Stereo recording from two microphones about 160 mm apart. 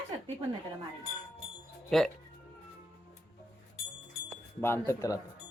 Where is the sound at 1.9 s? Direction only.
Centre (ahead or behind).